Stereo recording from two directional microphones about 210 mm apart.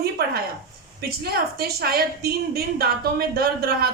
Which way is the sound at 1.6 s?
45° right (ahead or behind).